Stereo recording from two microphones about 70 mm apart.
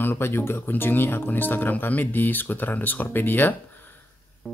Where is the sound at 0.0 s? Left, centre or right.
Left.